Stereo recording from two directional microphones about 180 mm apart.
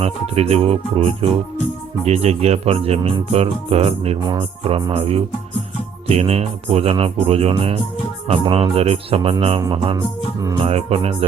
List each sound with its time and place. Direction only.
0.0 s speech: 35° right (ahead or behind)